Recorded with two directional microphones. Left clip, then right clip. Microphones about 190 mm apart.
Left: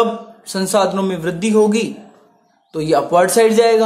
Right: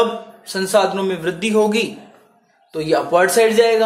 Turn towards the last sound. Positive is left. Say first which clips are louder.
# left 2 dB
turn(degrees=25)  # may be behind; listen again after turning